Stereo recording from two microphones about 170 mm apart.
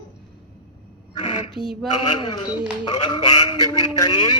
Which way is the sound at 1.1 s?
30° left (ahead or behind).